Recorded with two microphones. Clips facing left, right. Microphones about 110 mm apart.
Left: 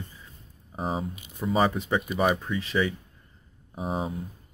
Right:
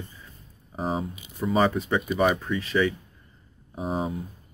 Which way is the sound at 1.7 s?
25° left (ahead or behind).